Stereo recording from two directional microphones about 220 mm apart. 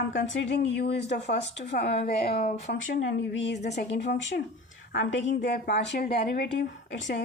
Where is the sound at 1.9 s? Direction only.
25° left (ahead or behind).